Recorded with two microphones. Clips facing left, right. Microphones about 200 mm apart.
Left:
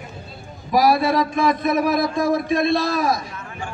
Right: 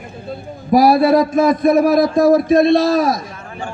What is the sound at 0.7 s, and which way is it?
A man's voice, 50° right (ahead or behind).